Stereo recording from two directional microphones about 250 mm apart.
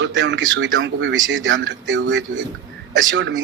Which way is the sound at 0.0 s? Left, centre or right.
Right.